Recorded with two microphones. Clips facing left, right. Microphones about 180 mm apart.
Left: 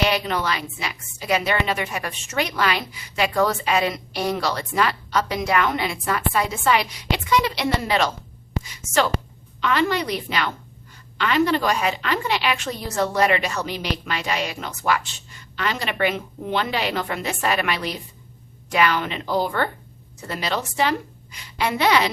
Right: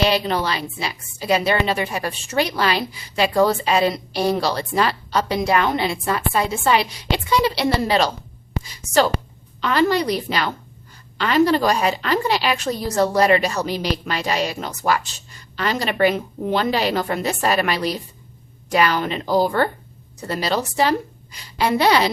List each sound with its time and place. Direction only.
0.0 s a woman's voice: 30° right (ahead or behind)